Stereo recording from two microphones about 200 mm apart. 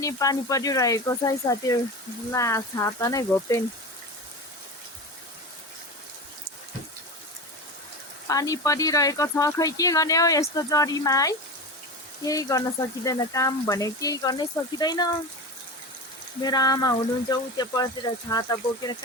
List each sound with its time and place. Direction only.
0.0 s speech: 15° left (ahead or behind)
8.3 s speech: 15° left (ahead or behind)
16.4 s speech: 20° left (ahead or behind)